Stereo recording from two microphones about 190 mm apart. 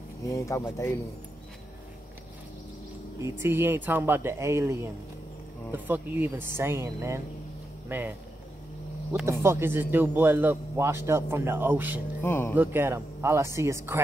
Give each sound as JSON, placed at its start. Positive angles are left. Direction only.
{"t": 0.2, "sound": "speech", "side_deg": 15}
{"t": 3.2, "sound": "speech", "side_deg": -15}
{"t": 9.2, "sound": "speech", "side_deg": -15}
{"t": 12.2, "sound": "speech", "side_deg": 10}
{"t": 12.5, "sound": "speech", "side_deg": -10}